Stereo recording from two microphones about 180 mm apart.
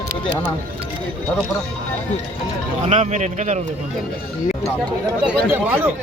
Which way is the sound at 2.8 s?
40° right (ahead or behind).